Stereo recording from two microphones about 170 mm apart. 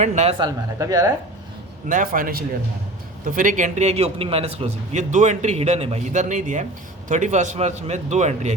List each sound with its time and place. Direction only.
0.0 s a man's voice: 40° right (ahead or behind)
0.3 s speech: 25° right (ahead or behind)
1.9 s a man's voice: 55° right (ahead or behind)